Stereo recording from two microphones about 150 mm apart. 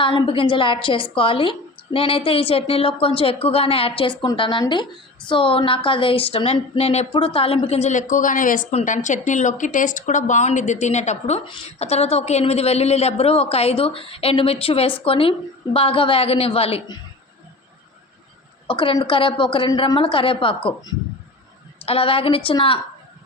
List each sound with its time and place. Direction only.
0.0 s a woman's voice: 35° left (ahead or behind)
11.4 s a woman's voice: 35° left (ahead or behind)
18.7 s a woman's voice: 35° left (ahead or behind)
21.8 s a woman's voice: 40° left (ahead or behind)